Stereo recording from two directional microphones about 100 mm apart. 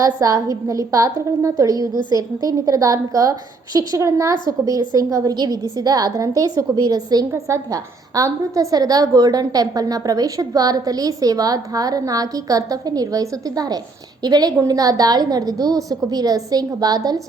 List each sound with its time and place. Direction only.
0.0 s a woman's voice: 35° right (ahead or behind)